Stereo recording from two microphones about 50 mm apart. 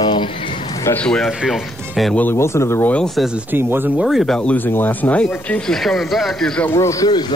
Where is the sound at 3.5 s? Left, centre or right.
Right.